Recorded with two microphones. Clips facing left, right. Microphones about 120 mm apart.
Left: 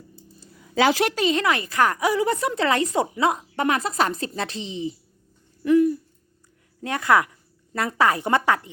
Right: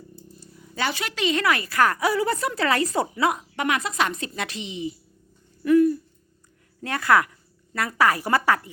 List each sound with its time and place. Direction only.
0.8 s a woman's voice: 90° left
1.1 s speech: 35° left (ahead or behind)
5.6 s owl: 20° left (ahead or behind)
6.8 s speech: 20° left (ahead or behind)